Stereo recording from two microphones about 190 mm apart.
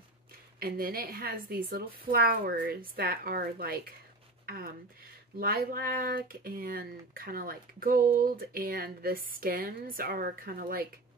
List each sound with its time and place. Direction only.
0.6 s speech: 55° right (ahead or behind)